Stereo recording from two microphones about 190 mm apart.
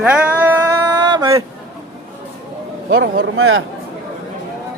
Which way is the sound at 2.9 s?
70° right (ahead or behind).